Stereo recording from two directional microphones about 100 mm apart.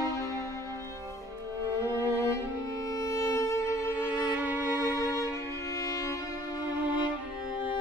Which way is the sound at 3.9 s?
15° right (ahead or behind).